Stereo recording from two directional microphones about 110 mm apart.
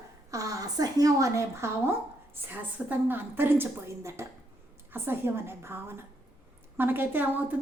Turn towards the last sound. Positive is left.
turn(degrees=-20)  # may be behind; listen again after turning